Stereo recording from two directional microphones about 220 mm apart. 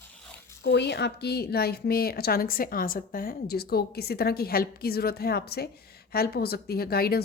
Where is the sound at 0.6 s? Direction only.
50° left (ahead or behind).